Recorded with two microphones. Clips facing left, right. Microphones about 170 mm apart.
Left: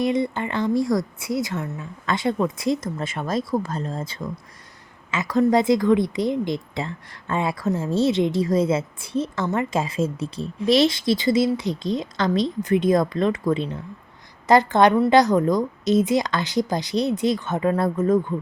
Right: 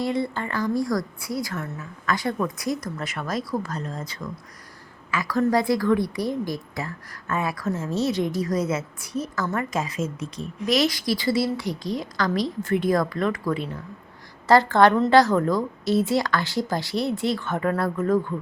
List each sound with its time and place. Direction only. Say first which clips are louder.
0.0 s speech: left 3 dB; 20° left (ahead or behind)